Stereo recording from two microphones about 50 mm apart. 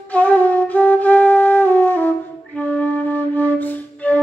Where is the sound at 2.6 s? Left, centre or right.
Centre.